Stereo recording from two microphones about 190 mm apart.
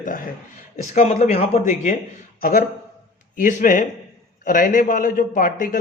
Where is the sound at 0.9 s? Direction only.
40° left (ahead or behind).